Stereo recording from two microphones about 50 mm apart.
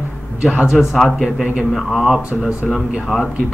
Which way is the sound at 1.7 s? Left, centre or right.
Centre.